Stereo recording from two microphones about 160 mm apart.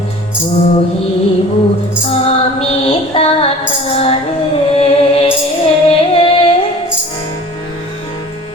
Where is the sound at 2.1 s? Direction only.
40° left (ahead or behind).